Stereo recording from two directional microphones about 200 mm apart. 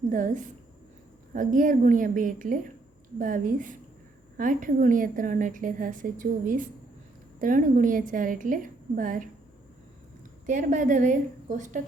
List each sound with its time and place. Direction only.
0.1 s a woman's voice: 40° right (ahead or behind)
10.4 s a woman's voice: 40° right (ahead or behind)